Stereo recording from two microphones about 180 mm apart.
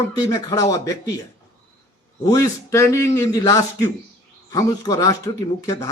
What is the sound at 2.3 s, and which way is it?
A man's voice, 20° left (ahead or behind).